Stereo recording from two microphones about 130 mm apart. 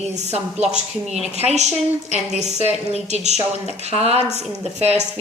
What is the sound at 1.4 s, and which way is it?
A woman's voice, 60° right (ahead or behind).